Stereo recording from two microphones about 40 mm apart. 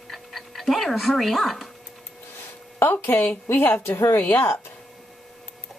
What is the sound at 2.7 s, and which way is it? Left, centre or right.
A woman's voice, left.